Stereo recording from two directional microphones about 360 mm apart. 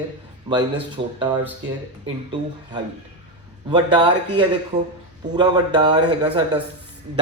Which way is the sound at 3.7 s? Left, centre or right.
Centre.